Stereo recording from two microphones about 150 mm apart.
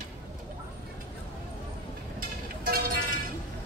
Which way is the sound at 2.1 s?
80° right.